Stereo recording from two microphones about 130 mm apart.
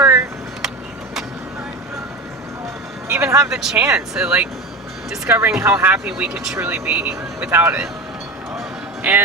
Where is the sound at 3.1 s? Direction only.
25° right (ahead or behind).